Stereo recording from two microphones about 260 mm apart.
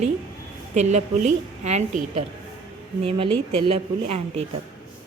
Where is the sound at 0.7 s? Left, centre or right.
Right.